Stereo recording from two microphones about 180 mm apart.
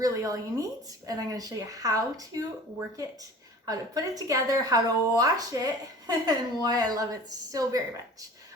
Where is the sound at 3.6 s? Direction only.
20° right (ahead or behind).